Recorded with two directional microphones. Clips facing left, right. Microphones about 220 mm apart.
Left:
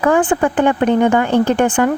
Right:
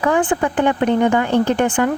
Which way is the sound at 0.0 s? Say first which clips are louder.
Left 3 dB; 50° left (ahead or behind).